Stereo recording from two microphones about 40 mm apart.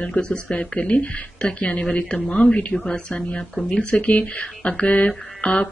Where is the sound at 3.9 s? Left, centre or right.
Left.